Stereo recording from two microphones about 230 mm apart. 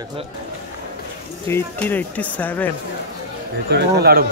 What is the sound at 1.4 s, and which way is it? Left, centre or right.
Speech, centre.